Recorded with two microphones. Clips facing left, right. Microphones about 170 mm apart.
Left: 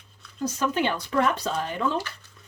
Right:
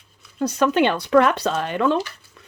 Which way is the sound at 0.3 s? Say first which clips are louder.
Right 7 dB; 70° right (ahead or behind).